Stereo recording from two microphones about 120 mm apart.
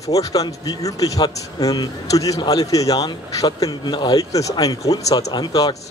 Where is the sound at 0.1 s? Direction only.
30° left (ahead or behind).